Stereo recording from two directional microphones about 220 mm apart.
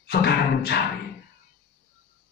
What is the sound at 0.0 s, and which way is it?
Music, 45° left (ahead or behind).